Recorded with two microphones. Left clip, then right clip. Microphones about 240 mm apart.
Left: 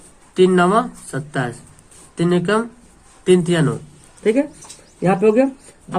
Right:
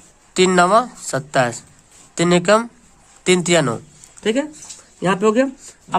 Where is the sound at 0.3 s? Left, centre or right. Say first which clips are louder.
Right 1 dB; right.